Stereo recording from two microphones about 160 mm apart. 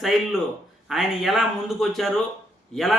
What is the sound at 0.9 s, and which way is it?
A man's voice, centre (ahead or behind).